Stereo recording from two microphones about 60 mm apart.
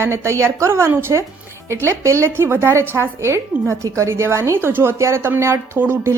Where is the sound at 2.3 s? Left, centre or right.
Right.